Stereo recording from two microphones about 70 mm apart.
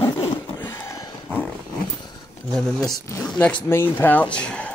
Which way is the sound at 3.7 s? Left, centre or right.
Left.